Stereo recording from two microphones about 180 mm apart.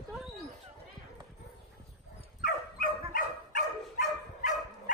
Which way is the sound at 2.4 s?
50° left (ahead or behind).